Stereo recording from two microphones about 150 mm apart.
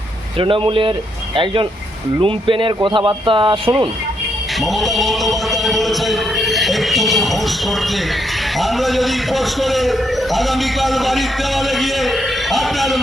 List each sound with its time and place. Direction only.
0.3 s speech: 35° right (ahead or behind)
2.2 s speech: 35° right (ahead or behind)
4.6 s speech: centre (ahead or behind)
8.5 s a man's voice: centre (ahead or behind)